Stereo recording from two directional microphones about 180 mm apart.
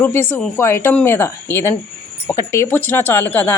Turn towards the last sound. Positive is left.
turn(degrees=10)  # may be behind; listen again after turning